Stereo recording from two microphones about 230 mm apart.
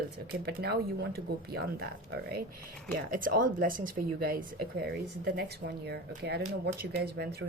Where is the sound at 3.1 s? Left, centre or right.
Right.